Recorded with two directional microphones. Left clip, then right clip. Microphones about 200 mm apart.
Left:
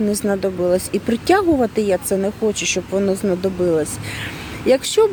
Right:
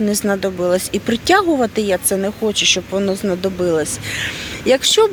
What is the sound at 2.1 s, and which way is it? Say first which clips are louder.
Speech: even; centre (ahead or behind).